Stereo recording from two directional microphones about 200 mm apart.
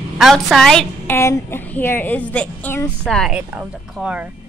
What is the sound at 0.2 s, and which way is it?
A woman's voice, centre (ahead or behind).